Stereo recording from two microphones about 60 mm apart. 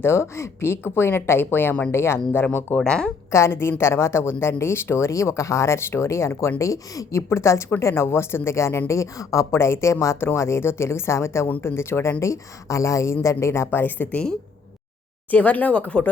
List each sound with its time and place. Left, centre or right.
0.0 s speech: left
2.7 s speech: centre
3.3 s speech: left
6.6 s a woman's voice: left
7.2 s a woman's voice: left
10.2 s speech: left
12.2 s a woman's voice: left
13.7 s speech: left
15.3 s speech: left